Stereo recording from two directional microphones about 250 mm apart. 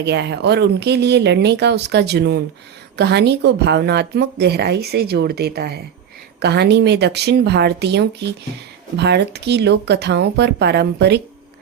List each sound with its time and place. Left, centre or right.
0.0 s a woman's voice: right